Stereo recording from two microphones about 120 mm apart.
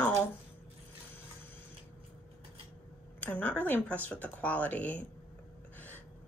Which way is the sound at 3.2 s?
15° left (ahead or behind).